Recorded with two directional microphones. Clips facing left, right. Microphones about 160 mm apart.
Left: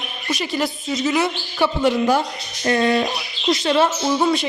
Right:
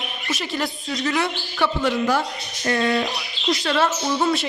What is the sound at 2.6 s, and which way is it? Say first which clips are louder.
Speech: left 3 dB; 30° left (ahead or behind).